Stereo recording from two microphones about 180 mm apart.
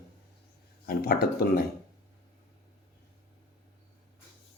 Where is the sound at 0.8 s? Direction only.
60° left (ahead or behind).